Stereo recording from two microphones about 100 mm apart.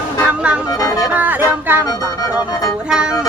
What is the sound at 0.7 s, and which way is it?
Music, 35° left (ahead or behind).